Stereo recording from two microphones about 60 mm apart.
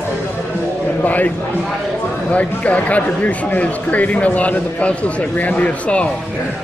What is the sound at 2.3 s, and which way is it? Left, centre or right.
A man's voice, left.